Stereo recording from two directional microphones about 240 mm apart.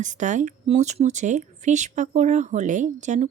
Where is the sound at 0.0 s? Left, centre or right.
Right.